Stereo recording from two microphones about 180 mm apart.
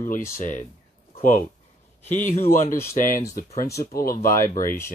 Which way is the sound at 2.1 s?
40° left (ahead or behind).